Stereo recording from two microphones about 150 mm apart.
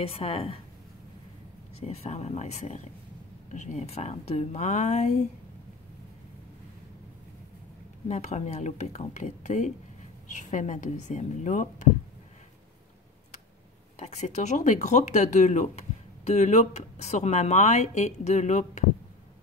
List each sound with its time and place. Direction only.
0.0 s a woman's voice: 40° left (ahead or behind)
1.8 s speech: 45° left (ahead or behind)
8.1 s speech: 50° left (ahead or behind)
13.9 s speech: 50° left (ahead or behind)